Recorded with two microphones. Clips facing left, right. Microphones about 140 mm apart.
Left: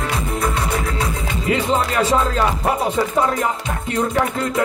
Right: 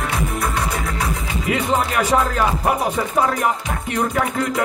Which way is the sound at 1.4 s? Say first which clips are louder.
Left 1 dB; 30° left (ahead or behind).